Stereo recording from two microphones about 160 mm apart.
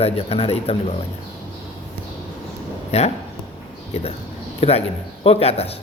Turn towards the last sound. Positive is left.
turn(degrees=40)  # may be behind; listen again after turning